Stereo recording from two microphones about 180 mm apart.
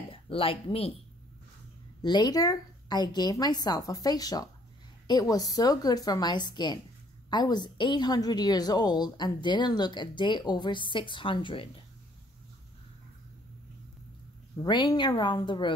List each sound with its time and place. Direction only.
0.1 s speech: 30° left (ahead or behind)
2.0 s a woman's voice: 25° left (ahead or behind)
14.6 s a woman's voice: 25° left (ahead or behind)